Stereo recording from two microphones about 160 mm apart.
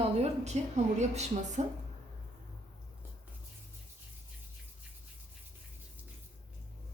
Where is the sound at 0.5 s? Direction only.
45° right (ahead or behind).